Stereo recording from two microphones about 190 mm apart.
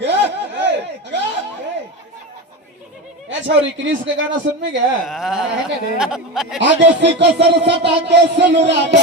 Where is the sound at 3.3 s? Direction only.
75° right (ahead or behind).